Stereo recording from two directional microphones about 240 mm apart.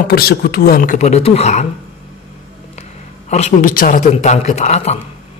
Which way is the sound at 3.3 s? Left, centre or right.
Left.